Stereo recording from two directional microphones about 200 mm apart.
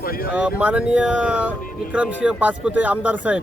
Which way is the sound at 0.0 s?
45° left (ahead or behind).